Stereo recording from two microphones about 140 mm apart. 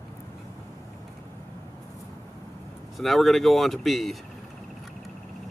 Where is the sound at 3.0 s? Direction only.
Centre (ahead or behind).